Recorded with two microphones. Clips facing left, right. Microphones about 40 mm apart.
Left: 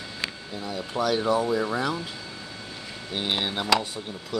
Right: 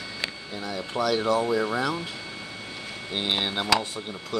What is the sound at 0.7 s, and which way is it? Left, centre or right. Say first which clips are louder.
Speech: even; centre.